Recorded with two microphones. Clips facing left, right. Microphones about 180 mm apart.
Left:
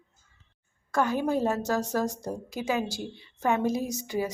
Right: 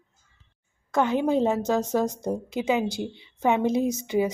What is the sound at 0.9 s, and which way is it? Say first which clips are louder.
A woman's voice: right 4 dB; 20° right (ahead or behind).